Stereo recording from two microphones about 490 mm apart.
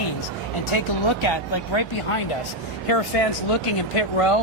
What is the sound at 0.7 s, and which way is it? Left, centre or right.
Speech, left.